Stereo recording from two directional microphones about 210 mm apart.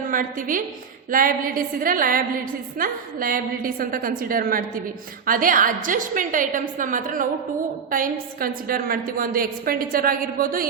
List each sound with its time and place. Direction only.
0.1 s a woman's voice: 40° right (ahead or behind)